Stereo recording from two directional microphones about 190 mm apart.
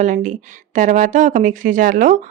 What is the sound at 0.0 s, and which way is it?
Speech, 45° right (ahead or behind).